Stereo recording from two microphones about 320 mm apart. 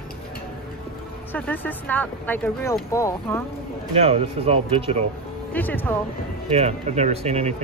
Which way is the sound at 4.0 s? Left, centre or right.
Centre.